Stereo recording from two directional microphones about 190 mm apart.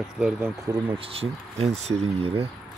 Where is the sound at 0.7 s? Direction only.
30° right (ahead or behind).